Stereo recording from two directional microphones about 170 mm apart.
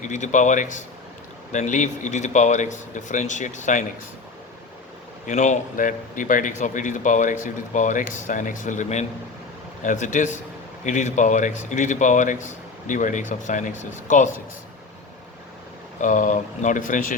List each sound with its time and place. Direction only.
0.0 s speech: 45° left (ahead or behind)
5.2 s speech: 45° left (ahead or behind)
16.0 s speech: 50° left (ahead or behind)